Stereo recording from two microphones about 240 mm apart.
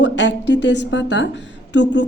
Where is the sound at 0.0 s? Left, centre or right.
Left.